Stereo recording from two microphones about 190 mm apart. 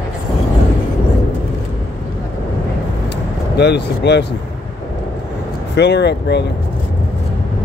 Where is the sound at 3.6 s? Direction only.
65° left (ahead or behind).